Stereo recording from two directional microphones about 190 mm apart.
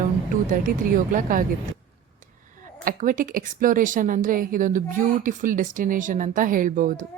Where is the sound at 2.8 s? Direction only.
45° right (ahead or behind).